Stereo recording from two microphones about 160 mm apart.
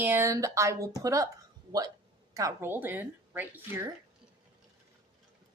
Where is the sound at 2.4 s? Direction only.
15° right (ahead or behind).